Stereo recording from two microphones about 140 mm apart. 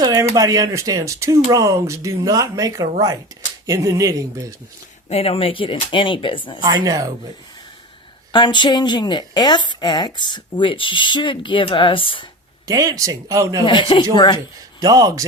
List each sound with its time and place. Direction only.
0.0 s speech: 25° right (ahead or behind)
5.0 s a woman's voice: 45° left (ahead or behind)
6.6 s speech: 25° right (ahead or behind)
8.3 s a woman's voice: 35° left (ahead or behind)
12.6 s speech: 25° right (ahead or behind)
13.7 s a woman's voice: 35° left (ahead or behind)
14.8 s speech: 25° right (ahead or behind)